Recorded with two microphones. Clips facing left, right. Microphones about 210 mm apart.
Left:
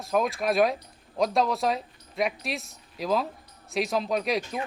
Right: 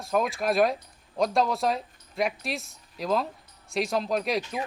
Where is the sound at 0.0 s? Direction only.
Centre (ahead or behind).